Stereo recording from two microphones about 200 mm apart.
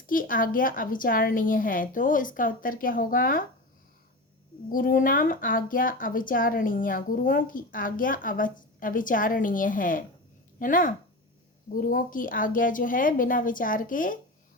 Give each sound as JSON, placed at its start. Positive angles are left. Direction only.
{"t": 0.1, "sound": "a woman's voice", "side_deg": 45}
{"t": 4.7, "sound": "a woman's voice", "side_deg": 45}